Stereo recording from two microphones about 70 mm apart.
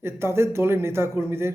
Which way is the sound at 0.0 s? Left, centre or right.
Right.